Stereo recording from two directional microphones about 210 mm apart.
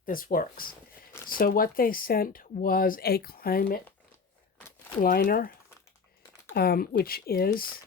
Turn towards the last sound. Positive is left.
turn(degrees=45)  # may be behind; listen again after turning